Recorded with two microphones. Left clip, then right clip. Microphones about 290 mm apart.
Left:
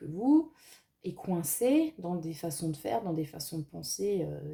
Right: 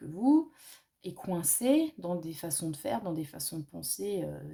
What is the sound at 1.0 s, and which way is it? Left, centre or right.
Speech, right.